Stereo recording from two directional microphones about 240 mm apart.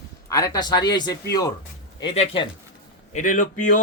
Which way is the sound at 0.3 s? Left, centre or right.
Centre.